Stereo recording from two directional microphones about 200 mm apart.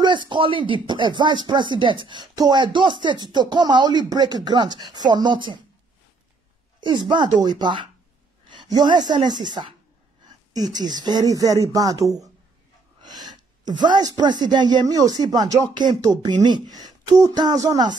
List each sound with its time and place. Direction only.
0.0 s speech: 25° right (ahead or behind)
7.3 s a woman's voice: 20° right (ahead or behind)
10.2 s a sound: 20° right (ahead or behind)
11.0 s speech: 20° right (ahead or behind)